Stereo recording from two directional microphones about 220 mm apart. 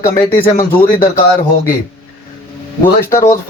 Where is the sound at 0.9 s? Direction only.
40° left (ahead or behind).